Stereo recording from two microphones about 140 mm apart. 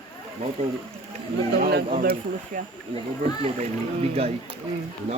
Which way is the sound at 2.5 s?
70° right (ahead or behind).